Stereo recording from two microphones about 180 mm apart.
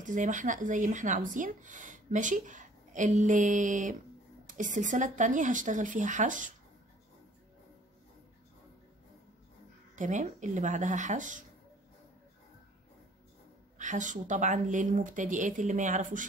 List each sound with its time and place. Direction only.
0.0 s speech: 45° right (ahead or behind)
9.9 s speech: 45° right (ahead or behind)
13.7 s speech: 45° right (ahead or behind)